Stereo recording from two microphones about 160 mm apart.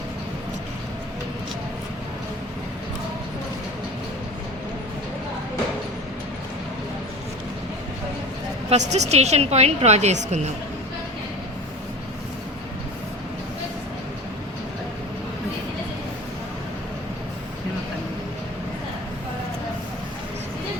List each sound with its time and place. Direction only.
8.7 s a woman's voice: 45° right (ahead or behind)